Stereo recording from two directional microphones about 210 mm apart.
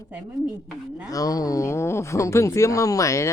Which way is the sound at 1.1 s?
15° left (ahead or behind).